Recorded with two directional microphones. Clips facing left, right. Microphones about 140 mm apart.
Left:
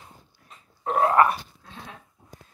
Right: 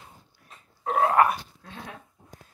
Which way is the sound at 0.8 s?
Centre (ahead or behind).